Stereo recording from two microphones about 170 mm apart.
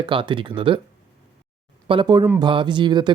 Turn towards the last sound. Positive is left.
turn(degrees=-25)  # may be behind; listen again after turning